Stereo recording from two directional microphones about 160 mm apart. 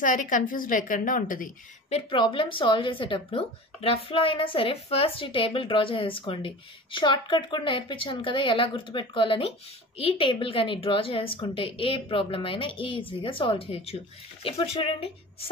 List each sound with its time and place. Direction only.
0.0 s a woman's voice: 55° left (ahead or behind)
1.9 s a woman's voice: 35° left (ahead or behind)